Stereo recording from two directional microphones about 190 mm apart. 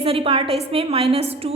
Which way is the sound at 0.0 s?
30° right (ahead or behind).